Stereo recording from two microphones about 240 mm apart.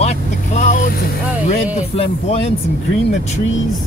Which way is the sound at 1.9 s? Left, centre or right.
Left.